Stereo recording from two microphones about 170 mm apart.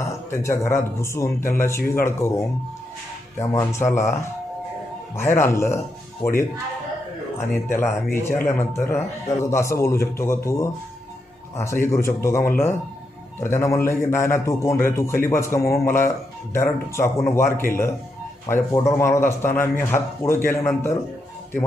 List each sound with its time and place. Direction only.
0.3 s a man's voice: 15° left (ahead or behind)
3.3 s a man's voice: 15° left (ahead or behind)
7.7 s a man's voice: 15° left (ahead or behind)